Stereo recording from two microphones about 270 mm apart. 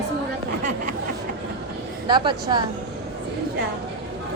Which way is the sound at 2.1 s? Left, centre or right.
Centre.